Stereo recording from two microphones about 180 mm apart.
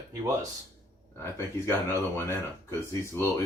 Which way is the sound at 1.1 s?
15° left (ahead or behind).